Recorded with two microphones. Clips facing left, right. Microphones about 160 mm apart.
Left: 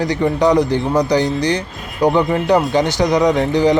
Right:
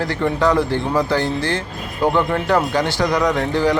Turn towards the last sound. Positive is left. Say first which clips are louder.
# left 4 dB
turn(degrees=20)  # may be behind; listen again after turning